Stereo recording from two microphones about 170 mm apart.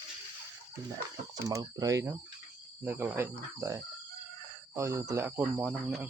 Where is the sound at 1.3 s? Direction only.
20° right (ahead or behind).